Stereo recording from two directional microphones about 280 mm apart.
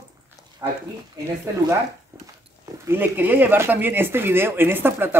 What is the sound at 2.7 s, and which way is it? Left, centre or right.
Speech, centre.